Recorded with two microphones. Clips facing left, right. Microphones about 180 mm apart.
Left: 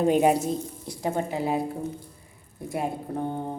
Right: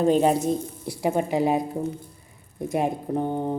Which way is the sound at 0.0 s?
10° left (ahead or behind).